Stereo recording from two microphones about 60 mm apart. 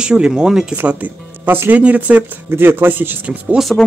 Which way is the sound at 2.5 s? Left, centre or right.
Right.